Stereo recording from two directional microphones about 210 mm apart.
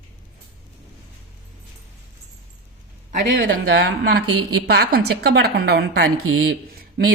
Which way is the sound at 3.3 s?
45° right (ahead or behind).